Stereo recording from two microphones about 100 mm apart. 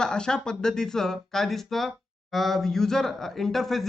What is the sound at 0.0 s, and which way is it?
Speech, 5° left (ahead or behind).